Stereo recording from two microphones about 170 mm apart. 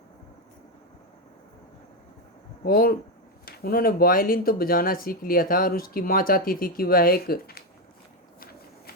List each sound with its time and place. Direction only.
2.6 s speech: 60° left (ahead or behind)